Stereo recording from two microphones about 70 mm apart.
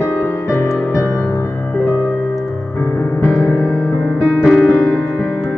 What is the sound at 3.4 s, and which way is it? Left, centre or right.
Music, centre.